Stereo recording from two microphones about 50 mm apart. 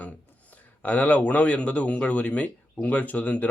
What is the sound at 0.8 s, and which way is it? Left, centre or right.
Speech, left.